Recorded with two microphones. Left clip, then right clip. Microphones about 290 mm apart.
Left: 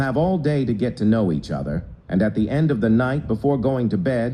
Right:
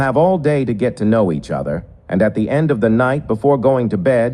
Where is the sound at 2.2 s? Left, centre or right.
Centre.